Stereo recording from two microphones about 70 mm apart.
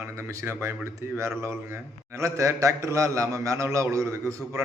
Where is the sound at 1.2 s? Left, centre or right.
Right.